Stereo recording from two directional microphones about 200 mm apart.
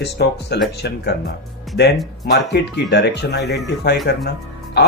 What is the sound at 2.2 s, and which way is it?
Speech, 55° left (ahead or behind).